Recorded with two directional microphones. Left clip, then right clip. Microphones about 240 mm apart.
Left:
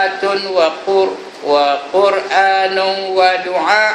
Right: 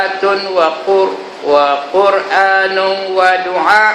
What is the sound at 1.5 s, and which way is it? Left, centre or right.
A man's voice, centre.